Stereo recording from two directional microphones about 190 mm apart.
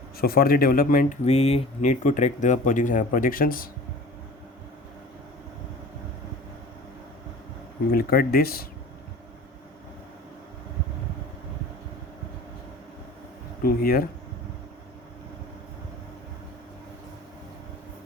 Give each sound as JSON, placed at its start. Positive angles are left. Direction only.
{"t": 0.2, "sound": "speech", "side_deg": 50}
{"t": 7.9, "sound": "speech", "side_deg": 50}
{"t": 13.6, "sound": "speech", "side_deg": 50}